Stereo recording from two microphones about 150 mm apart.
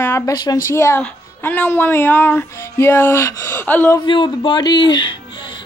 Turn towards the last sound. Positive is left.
turn(degrees=30)  # may be behind; listen again after turning